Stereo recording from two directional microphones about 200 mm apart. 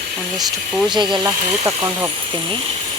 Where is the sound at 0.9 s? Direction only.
25° right (ahead or behind).